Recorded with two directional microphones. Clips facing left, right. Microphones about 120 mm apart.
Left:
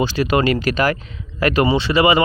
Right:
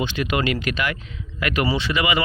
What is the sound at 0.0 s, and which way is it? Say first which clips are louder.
Speech: left 6 dB; 35° left (ahead or behind).